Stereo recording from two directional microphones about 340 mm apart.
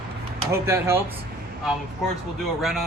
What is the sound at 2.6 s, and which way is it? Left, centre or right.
Speech, centre.